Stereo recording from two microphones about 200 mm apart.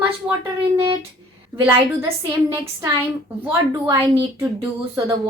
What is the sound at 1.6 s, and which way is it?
Speech, 15° right (ahead or behind).